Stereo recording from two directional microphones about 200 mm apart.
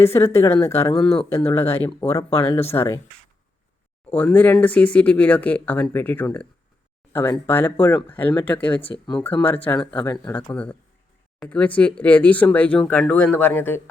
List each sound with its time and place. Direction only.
0.0 s speech: 15° left (ahead or behind)
4.1 s speech: 10° left (ahead or behind)
9.9 s speech: 20° left (ahead or behind)
10.2 s speech: 10° left (ahead or behind)